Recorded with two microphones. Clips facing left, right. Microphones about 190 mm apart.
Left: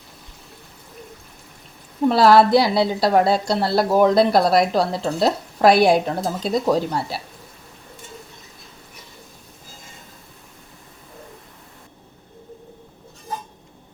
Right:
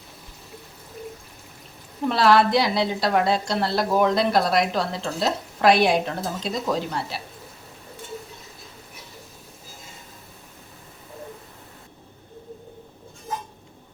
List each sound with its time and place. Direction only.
2.0 s speech: 35° left (ahead or behind)